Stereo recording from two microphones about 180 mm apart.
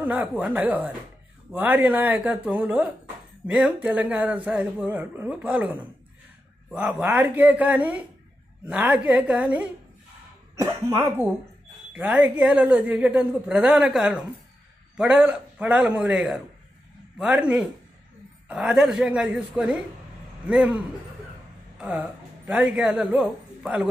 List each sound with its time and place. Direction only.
0.0 s speech: 10° right (ahead or behind)